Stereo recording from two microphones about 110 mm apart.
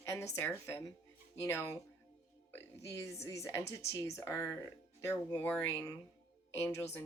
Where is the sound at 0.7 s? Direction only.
25° left (ahead or behind).